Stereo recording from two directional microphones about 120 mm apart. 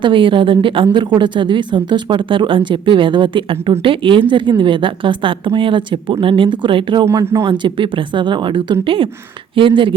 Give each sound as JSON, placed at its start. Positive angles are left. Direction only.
{"t": 0.0, "sound": "speech", "side_deg": -45}
{"t": 7.0, "sound": "speech", "side_deg": -25}
{"t": 7.6, "sound": "speech", "side_deg": -45}